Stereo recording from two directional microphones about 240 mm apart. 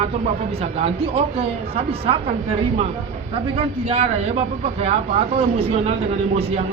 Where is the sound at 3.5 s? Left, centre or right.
Right.